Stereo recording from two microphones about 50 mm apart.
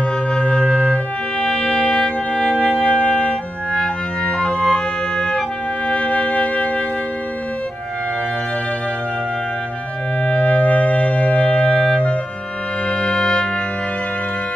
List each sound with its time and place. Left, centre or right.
0.3 s music: left
5.9 s music: left
10.2 s music: left